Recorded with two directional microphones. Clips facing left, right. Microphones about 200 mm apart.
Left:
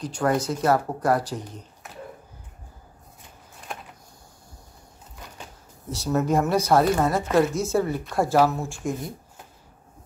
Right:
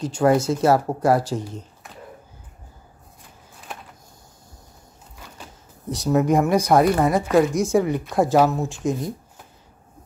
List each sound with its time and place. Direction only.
0.0 s speech: 25° right (ahead or behind)
5.9 s speech: 15° right (ahead or behind)